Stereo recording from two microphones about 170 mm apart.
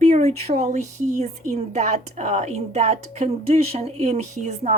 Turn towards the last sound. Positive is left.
turn(degrees=-45)  # may be behind; listen again after turning